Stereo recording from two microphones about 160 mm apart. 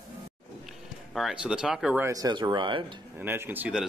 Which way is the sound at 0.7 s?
Centre (ahead or behind).